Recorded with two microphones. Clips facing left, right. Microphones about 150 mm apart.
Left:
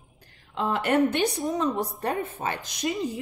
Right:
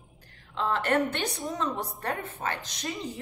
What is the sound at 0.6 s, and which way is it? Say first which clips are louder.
A woman's voice: left 3 dB; 15° left (ahead or behind).